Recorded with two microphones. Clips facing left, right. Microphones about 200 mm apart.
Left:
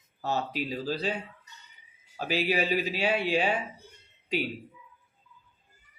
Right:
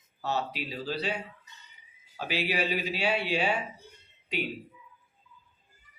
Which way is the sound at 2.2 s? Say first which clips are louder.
Left 3 dB; 45° left (ahead or behind).